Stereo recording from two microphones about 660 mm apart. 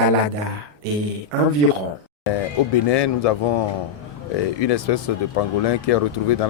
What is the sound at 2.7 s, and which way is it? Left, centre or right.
A man's voice, left.